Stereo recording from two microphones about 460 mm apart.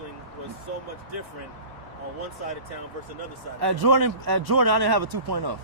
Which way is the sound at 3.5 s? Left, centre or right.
Right.